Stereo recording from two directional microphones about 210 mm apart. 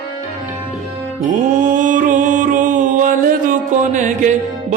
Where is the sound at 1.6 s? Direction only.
40° right (ahead or behind).